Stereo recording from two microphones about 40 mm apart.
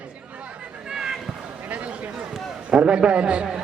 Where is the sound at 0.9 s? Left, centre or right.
Centre.